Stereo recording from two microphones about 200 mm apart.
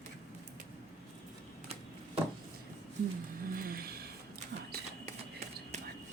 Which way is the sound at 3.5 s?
45° right (ahead or behind).